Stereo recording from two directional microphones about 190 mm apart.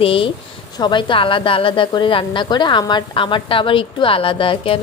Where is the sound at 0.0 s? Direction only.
30° left (ahead or behind).